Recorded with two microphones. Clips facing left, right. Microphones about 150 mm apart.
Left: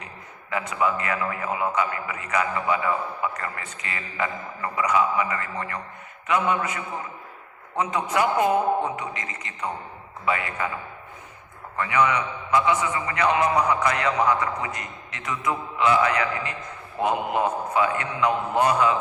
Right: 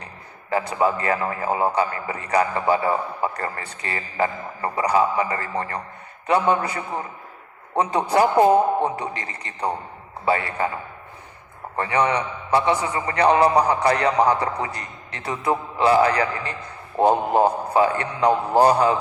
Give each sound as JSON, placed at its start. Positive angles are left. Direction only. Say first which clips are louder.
{"t": 0.5, "sound": "a man's voice", "louder": "right 4 dB", "side_deg": -35}
{"t": 11.8, "sound": "a man's voice", "louder": "right 1 dB", "side_deg": -35}